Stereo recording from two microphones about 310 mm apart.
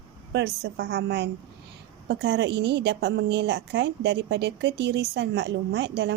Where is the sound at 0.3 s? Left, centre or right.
Right.